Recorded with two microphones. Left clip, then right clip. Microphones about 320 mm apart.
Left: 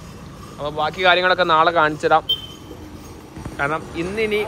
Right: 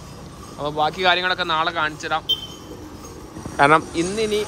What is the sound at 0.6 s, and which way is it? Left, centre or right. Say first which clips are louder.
Speech: left 1 dB; centre.